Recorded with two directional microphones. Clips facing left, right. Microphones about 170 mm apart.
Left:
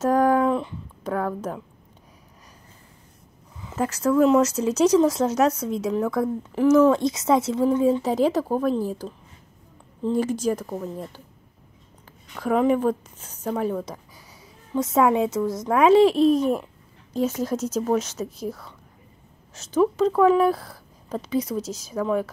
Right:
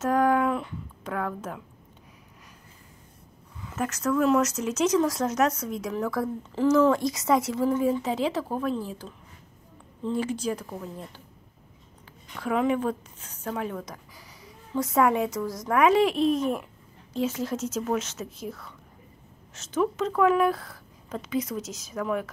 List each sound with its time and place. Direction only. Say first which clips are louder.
0.0 s a sound: left 4 dB; 35° left (ahead or behind)
3.6 s speech: left 5 dB; 30° left (ahead or behind)
8.0 s a woman's voice: left 6 dB; 40° left (ahead or behind)
12.4 s a woman's voice: left 5 dB; 40° left (ahead or behind)
14.7 s speech: left 3 dB; 25° left (ahead or behind)